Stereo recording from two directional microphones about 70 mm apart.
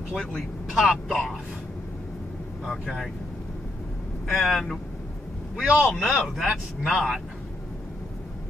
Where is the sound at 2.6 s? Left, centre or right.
Centre.